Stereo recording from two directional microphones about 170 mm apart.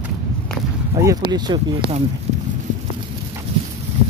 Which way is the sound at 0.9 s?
20° right (ahead or behind).